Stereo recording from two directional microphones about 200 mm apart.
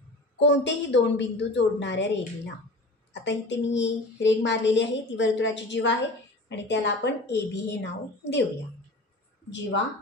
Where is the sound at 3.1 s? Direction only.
60° left (ahead or behind).